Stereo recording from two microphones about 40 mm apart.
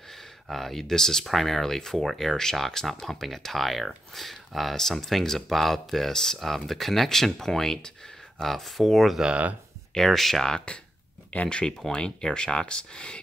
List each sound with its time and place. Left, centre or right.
0.5 s speech: centre
11.4 s speech: left